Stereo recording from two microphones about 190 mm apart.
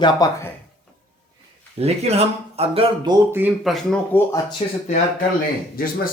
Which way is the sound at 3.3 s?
5° right (ahead or behind).